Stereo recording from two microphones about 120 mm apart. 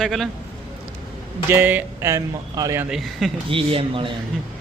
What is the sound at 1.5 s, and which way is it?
Speech, 15° right (ahead or behind).